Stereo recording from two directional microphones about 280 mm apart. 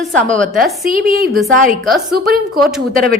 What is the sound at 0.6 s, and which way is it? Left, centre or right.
Speech, right.